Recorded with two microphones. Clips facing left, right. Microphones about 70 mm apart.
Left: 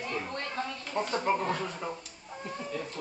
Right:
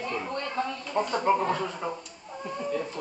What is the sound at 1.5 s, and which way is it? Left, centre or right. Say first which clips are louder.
Speech: right 4 dB; centre.